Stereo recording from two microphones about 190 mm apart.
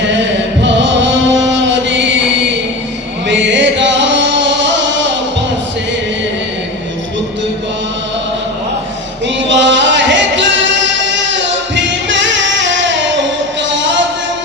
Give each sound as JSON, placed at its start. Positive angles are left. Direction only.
{"t": 0.6, "sound": "music", "side_deg": -70}
{"t": 9.2, "sound": "music", "side_deg": -70}